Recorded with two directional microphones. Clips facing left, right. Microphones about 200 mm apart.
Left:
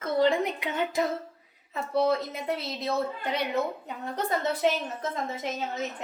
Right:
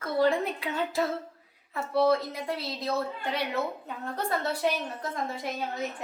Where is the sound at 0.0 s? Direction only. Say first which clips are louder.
Left 1 dB; 20° left (ahead or behind).